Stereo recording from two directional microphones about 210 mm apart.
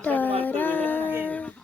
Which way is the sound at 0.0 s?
10° left (ahead or behind).